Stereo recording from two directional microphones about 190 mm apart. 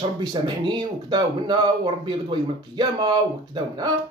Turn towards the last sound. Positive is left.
turn(degrees=-20)  # may be behind; listen again after turning